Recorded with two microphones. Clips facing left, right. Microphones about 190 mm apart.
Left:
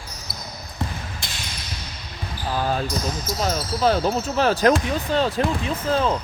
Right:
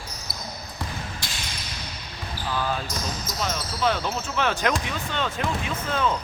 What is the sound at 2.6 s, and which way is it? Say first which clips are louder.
Basketball bounce: left 5 dB; 40° left (ahead or behind).